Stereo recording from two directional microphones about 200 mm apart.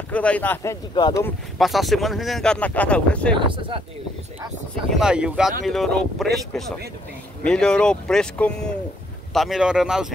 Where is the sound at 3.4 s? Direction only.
25° right (ahead or behind).